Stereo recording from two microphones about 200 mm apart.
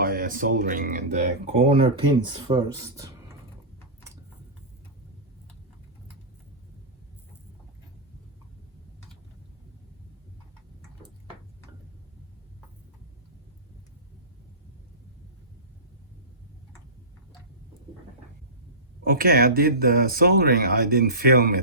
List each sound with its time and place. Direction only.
0.0 s speech: 45° right (ahead or behind)
1.5 s speech: 30° right (ahead or behind)
19.0 s speech: 45° right (ahead or behind)